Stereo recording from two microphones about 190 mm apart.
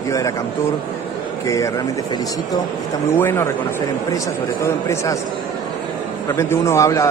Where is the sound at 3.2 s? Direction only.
10° left (ahead or behind).